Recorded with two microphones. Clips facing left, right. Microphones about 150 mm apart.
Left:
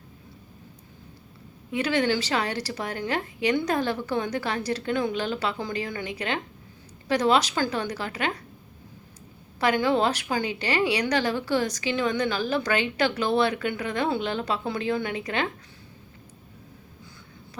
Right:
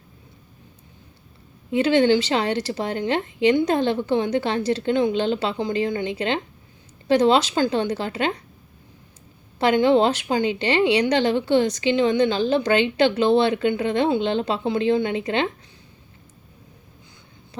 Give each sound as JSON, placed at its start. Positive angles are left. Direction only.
{"t": 1.7, "sound": "a woman's voice", "side_deg": -25}
{"t": 9.6, "sound": "a woman's voice", "side_deg": -25}